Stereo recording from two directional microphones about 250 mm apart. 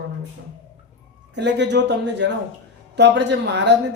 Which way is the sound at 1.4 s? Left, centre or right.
Right.